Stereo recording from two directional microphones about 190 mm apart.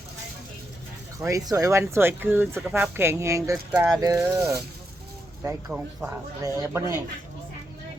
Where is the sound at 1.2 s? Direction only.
15° right (ahead or behind).